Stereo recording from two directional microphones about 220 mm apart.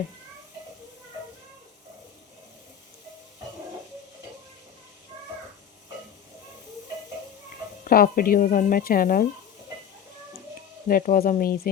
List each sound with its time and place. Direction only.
7.9 s speech: 40° left (ahead or behind)
10.8 s speech: 40° left (ahead or behind)